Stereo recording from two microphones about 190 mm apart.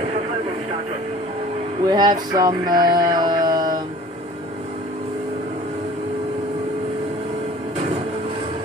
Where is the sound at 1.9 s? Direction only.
20° right (ahead or behind).